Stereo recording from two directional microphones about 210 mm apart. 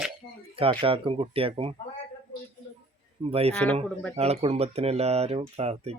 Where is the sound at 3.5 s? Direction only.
5° left (ahead or behind).